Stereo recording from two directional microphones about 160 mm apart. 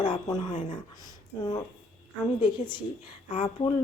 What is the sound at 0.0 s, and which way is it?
Speech, 30° left (ahead or behind).